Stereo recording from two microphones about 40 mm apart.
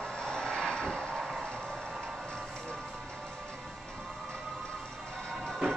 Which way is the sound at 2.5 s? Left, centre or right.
Centre.